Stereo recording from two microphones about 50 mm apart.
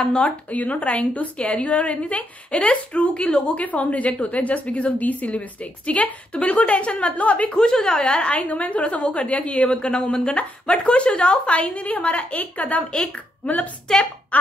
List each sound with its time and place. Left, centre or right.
0.2 s a woman's voice: left
7.5 s a woman's voice: centre; by 12.8 s left
12.9 s a woman's voice: left
13.4 s a woman's voice: left
13.9 s a woman's voice: centre
14.3 s a sound: left